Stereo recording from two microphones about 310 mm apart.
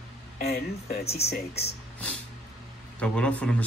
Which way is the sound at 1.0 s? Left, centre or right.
Centre.